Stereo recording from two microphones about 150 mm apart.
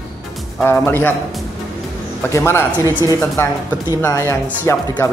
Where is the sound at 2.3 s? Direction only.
20° left (ahead or behind).